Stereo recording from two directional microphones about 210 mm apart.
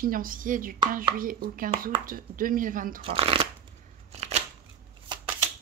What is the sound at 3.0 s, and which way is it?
Speech, 25° right (ahead or behind).